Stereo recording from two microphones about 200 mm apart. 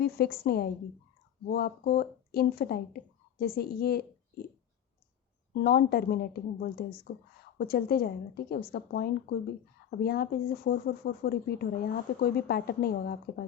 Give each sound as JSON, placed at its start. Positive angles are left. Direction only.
{"t": 0.0, "sound": "speech", "side_deg": 50}
{"t": 5.5, "sound": "speech", "side_deg": 50}